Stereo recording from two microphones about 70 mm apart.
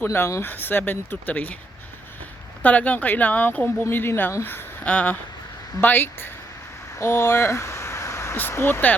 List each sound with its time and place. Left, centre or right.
0.0 s a woman's voice: left
2.6 s speech: left
3.8 s a woman's voice: left
4.4 s a woman's voice: left
7.0 s a sound: left
8.5 s a woman's voice: left